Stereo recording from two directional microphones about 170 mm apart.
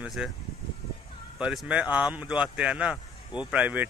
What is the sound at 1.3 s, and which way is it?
Speech, 5° right (ahead or behind).